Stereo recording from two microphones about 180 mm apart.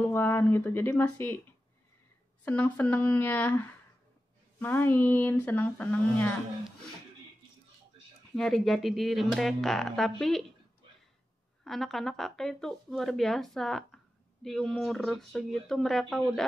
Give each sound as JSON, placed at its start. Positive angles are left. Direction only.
{"t": 0.0, "sound": "speech", "side_deg": 15}
{"t": 2.4, "sound": "speech", "side_deg": 10}
{"t": 8.4, "sound": "speech", "side_deg": 0}
{"t": 11.6, "sound": "speech", "side_deg": 0}